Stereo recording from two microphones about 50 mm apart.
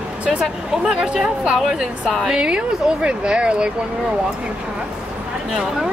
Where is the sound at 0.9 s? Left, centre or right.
Centre.